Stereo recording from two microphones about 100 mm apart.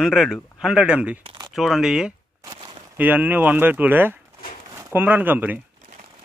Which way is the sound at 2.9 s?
15° right (ahead or behind).